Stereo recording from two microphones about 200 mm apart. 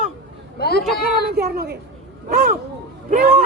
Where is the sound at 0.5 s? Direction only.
50° left (ahead or behind).